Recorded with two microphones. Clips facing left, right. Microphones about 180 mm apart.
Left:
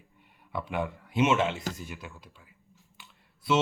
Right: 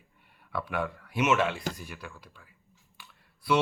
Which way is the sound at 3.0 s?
20° left (ahead or behind).